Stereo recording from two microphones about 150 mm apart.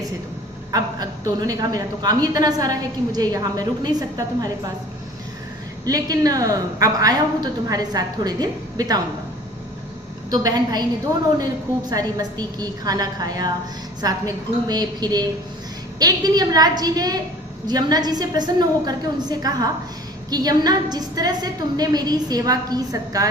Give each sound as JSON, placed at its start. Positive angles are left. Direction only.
{"t": 0.7, "sound": "a woman's voice", "side_deg": -25}
{"t": 5.8, "sound": "a woman's voice", "side_deg": -25}
{"t": 10.2, "sound": "a woman's voice", "side_deg": -25}
{"t": 11.9, "sound": "a woman's voice", "side_deg": -25}